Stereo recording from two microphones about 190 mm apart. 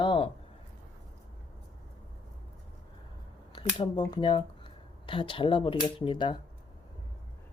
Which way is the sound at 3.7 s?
20° left (ahead or behind).